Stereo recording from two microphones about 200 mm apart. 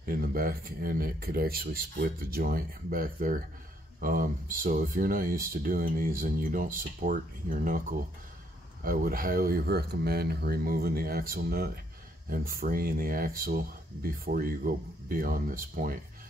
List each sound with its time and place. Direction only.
0.0 s speech: 45° right (ahead or behind)
8.8 s speech: 45° right (ahead or behind)